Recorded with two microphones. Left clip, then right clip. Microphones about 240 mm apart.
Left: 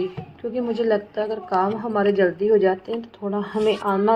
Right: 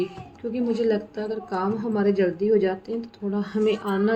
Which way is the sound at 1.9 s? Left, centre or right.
Left.